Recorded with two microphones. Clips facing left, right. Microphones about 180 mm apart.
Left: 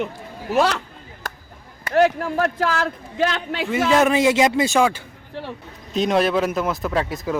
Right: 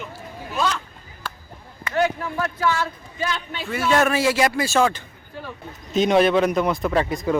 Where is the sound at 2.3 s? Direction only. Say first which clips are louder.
Left 2 dB; 55° left (ahead or behind); by 3.6 s 70° left (ahead or behind).